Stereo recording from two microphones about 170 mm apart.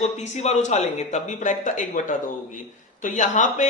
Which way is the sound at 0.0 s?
40° left (ahead or behind).